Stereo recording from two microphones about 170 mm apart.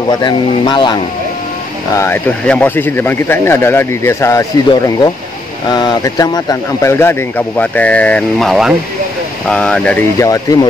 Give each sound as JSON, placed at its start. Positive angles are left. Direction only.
{"t": 0.1, "sound": "speech", "side_deg": 25}
{"t": 2.0, "sound": "speech", "side_deg": 10}
{"t": 10.1, "sound": "speech", "side_deg": 20}